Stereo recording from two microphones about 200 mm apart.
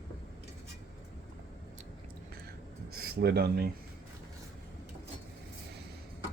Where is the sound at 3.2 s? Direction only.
55° right (ahead or behind).